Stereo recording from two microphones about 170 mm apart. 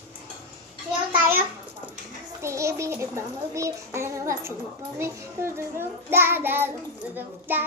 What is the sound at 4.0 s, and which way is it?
Child singing, 15° right (ahead or behind).